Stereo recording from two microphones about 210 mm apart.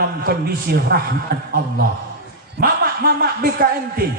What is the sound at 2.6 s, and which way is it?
Speech, 45° right (ahead or behind).